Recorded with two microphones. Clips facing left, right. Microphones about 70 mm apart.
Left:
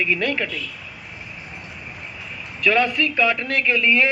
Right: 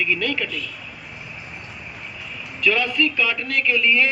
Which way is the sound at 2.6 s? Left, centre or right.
Left.